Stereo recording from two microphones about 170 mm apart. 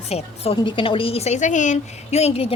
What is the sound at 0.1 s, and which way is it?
A woman's voice, 40° left (ahead or behind).